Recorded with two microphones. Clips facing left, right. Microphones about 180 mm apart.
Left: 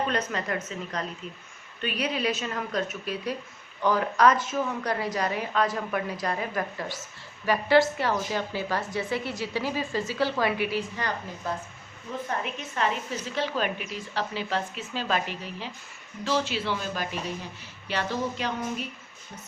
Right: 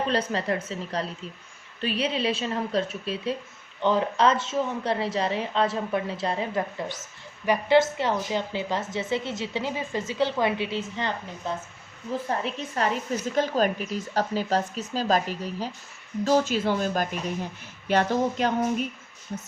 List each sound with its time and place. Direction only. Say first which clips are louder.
0.1 s a woman's voice: right 3 dB; 30° right (ahead or behind)
12.4 s a woman's voice: right 2 dB; 35° right (ahead or behind)